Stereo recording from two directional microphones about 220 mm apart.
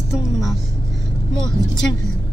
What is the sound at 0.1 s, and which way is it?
Speech, centre (ahead or behind).